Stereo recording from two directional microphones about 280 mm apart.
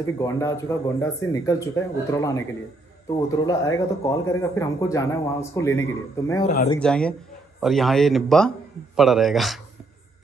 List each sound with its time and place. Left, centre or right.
0.0 s speech: centre
6.4 s speech: left
6.8 s a man's voice: centre